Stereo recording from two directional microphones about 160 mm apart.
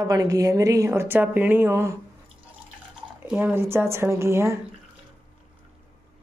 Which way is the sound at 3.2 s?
10° right (ahead or behind).